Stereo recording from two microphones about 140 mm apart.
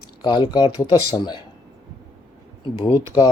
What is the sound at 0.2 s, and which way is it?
Speech, 30° left (ahead or behind).